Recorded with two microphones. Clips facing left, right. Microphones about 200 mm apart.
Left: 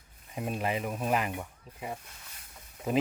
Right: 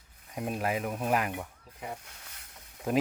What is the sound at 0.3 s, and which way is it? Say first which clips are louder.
Speech: right 1 dB; centre (ahead or behind).